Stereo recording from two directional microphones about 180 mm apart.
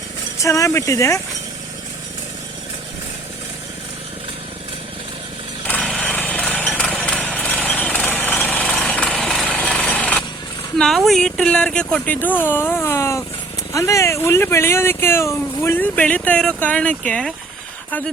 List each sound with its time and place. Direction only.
0.4 s speech: 15° left (ahead or behind)
5.6 s a sound: 10° left (ahead or behind)
10.8 s speech: centre (ahead or behind)